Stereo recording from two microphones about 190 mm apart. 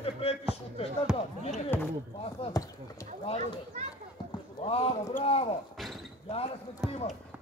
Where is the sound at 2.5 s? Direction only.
20° left (ahead or behind).